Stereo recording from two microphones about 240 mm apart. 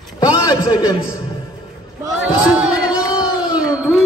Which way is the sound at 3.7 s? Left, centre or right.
Centre.